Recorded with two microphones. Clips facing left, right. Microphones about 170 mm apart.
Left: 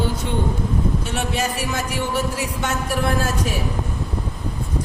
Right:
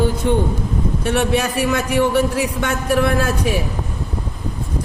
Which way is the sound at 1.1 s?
65° right (ahead or behind).